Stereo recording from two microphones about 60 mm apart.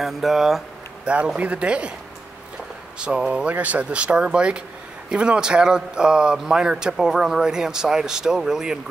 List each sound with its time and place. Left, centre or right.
0.0 s speech: centre
1.0 s speech: centre
3.0 s a man's voice: centre